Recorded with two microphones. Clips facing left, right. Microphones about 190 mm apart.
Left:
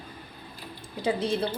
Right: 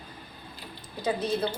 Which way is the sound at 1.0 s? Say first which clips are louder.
Left 2 dB; 30° left (ahead or behind).